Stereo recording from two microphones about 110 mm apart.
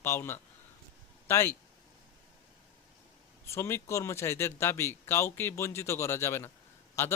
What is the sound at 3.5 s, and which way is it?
Speech, 25° left (ahead or behind).